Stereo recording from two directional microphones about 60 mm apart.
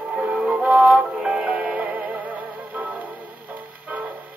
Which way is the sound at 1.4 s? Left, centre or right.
Right.